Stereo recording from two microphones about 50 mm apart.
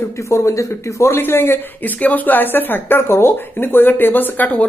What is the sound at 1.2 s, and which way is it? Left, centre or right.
Speech, left.